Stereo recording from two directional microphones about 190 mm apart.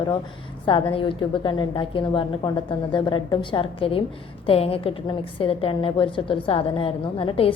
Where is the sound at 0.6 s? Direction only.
25° left (ahead or behind).